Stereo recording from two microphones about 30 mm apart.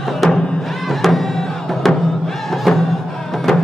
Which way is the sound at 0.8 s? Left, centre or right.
Centre.